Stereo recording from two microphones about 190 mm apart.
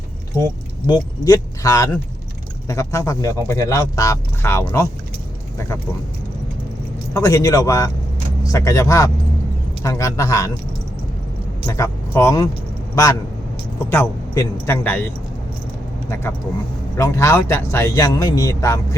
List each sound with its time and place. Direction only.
0.9 s speech: 20° left (ahead or behind)
7.1 s speech: 15° left (ahead or behind)
11.6 s speech: 15° left (ahead or behind)
13.9 s speech: 10° left (ahead or behind)